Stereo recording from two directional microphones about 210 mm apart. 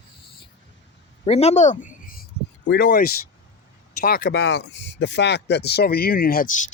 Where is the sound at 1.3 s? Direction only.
30° left (ahead or behind).